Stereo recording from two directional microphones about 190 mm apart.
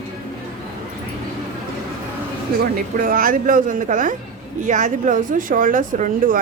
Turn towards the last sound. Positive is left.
turn(degrees=-45)  # may be behind; listen again after turning